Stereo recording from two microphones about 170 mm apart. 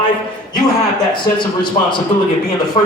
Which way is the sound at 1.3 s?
25° left (ahead or behind).